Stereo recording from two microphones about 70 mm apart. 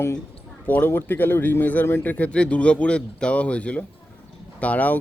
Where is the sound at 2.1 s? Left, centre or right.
Centre.